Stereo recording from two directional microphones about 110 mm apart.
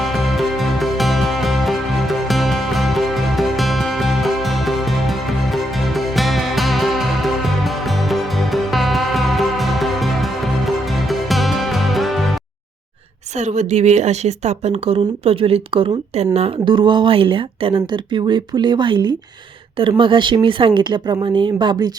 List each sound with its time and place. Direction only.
0.0 s music: centre (ahead or behind)
13.4 s speech: 90° right; by 16.5 s 70° right (ahead or behind)
16.6 s speech: 50° right (ahead or behind)